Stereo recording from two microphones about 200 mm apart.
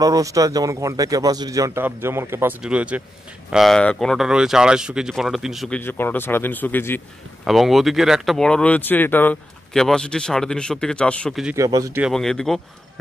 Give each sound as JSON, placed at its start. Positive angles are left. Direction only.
{"t": 0.0, "sound": "a man's voice", "side_deg": -15}
{"t": 5.8, "sound": "speech", "side_deg": 10}
{"t": 7.4, "sound": "speech", "side_deg": 0}
{"t": 11.5, "sound": "a man's voice", "side_deg": -15}
{"t": 12.0, "sound": "speech", "side_deg": 0}